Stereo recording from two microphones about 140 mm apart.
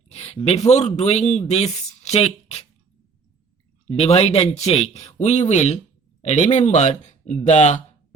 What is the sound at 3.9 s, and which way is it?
A man's voice, 45° left (ahead or behind).